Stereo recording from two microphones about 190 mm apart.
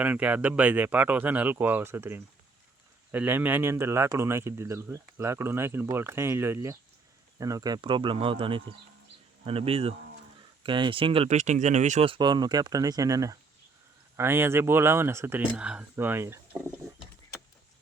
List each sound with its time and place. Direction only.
0.0 s speech: 10° right (ahead or behind)